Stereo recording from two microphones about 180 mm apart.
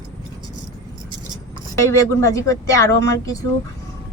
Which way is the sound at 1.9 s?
15° left (ahead or behind).